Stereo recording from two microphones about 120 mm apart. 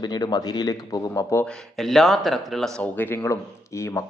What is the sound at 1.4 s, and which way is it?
Speech, centre (ahead or behind).